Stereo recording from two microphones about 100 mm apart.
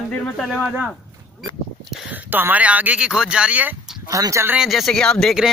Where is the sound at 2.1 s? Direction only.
20° right (ahead or behind).